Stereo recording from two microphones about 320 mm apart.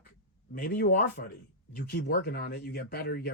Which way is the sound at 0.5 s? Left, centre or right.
Left.